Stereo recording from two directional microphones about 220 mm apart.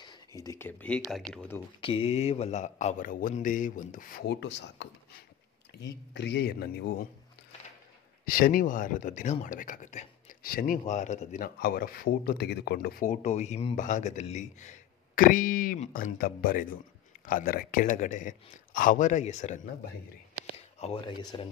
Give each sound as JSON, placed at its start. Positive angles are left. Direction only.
{"t": 0.0, "sound": "speech", "side_deg": 15}
{"t": 1.8, "sound": "speech", "side_deg": 25}
{"t": 8.3, "sound": "speech", "side_deg": 40}